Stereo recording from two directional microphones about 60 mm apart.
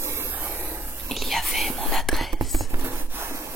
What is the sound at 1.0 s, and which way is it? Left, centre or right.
Whispering, centre.